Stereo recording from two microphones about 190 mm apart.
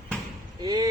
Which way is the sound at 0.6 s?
20° right (ahead or behind).